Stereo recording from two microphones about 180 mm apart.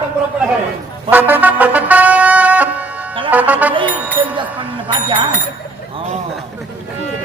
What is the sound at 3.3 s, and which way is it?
Music, 10° right (ahead or behind).